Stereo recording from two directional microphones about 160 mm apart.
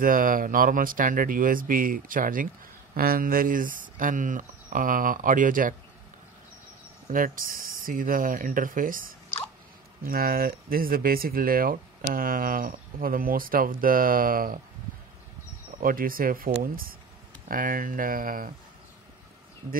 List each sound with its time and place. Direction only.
0.0 s speech: 60° right (ahead or behind)
7.1 s speech: 60° right (ahead or behind)
15.8 s speech: 65° right (ahead or behind)